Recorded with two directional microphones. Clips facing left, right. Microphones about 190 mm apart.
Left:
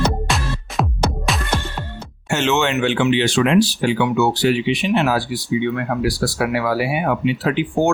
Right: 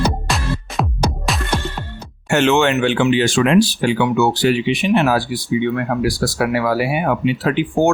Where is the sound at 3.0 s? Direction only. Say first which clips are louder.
Right 1 dB; 45° right (ahead or behind).